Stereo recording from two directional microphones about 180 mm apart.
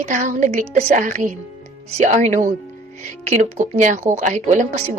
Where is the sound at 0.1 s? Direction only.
45° right (ahead or behind).